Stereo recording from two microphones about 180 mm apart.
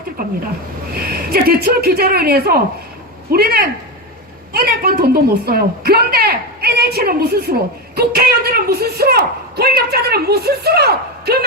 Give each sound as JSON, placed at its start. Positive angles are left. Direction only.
{"t": 0.2, "sound": "a woman's voice", "side_deg": -55}